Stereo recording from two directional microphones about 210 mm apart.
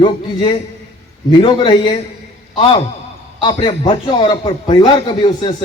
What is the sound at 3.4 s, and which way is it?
A man's voice, 25° left (ahead or behind).